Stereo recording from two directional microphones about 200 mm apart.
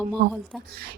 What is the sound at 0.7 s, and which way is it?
Speech, 50° right (ahead or behind).